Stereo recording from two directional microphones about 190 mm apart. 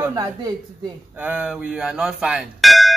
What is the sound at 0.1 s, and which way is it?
Speech, 20° right (ahead or behind).